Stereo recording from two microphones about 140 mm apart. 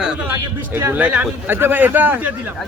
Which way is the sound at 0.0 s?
10° right (ahead or behind).